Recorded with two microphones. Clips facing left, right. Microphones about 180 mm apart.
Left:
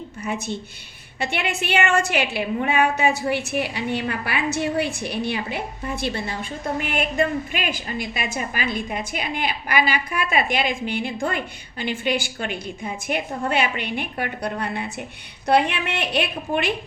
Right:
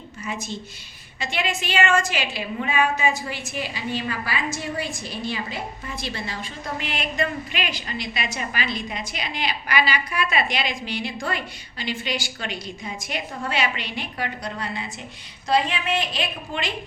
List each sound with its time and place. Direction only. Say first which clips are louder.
0.3 s a woman's voice: left 4 dB; 60° left (ahead or behind)